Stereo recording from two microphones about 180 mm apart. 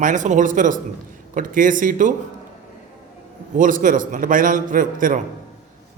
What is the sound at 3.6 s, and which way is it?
A man's voice, 50° right (ahead or behind).